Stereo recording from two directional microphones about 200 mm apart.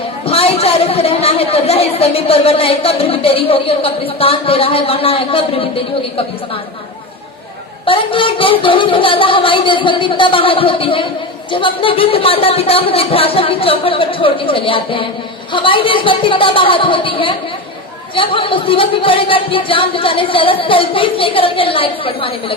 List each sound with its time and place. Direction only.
0.3 s a woman's voice: 30° left (ahead or behind)
7.9 s a woman's voice: 25° left (ahead or behind)